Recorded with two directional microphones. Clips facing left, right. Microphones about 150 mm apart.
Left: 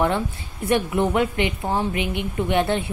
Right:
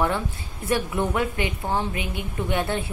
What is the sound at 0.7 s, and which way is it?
A woman's voice, 20° left (ahead or behind).